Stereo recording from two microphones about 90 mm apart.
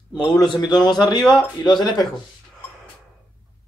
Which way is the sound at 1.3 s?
50° left (ahead or behind).